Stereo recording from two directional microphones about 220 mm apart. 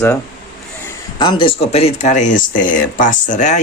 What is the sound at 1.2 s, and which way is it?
Speech, 20° left (ahead or behind).